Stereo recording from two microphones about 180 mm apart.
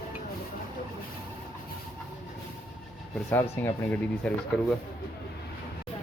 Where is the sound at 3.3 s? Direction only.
15° left (ahead or behind).